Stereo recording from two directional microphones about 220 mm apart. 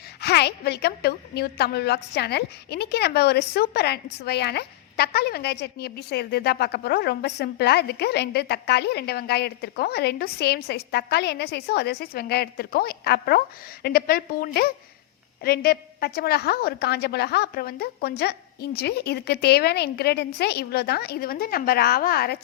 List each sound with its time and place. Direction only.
0.2 s a woman's voice: 45° left (ahead or behind)